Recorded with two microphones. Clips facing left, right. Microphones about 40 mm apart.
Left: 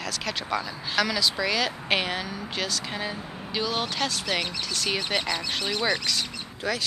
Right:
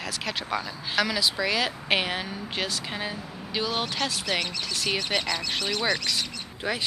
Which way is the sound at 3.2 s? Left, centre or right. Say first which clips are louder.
Left 1 dB; left.